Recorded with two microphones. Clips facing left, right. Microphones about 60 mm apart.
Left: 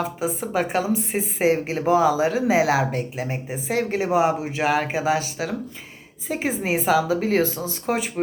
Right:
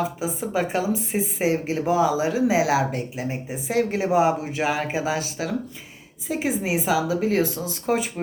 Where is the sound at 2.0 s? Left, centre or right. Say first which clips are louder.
Left 2 dB; left.